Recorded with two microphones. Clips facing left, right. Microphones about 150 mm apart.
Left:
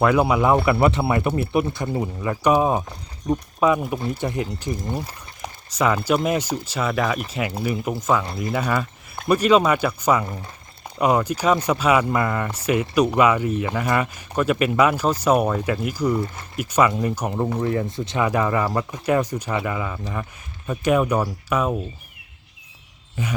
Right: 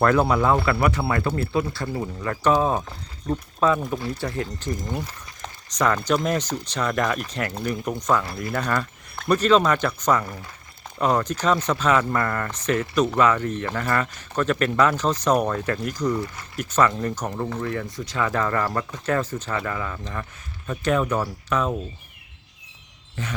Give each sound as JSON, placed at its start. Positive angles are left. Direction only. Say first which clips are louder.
{"t": 0.0, "sound": "speech", "louder": "left 1 dB", "side_deg": 10}
{"t": 10.2, "sound": "speech", "louder": "left 3 dB", "side_deg": 20}
{"t": 16.2, "sound": "speech", "louder": "left 3 dB", "side_deg": 25}
{"t": 16.6, "sound": "speech", "louder": "left 2 dB", "side_deg": 10}
{"t": 17.3, "sound": "speech", "louder": "left 5 dB", "side_deg": 20}
{"t": 23.2, "sound": "speech", "louder": "left 4 dB", "side_deg": 10}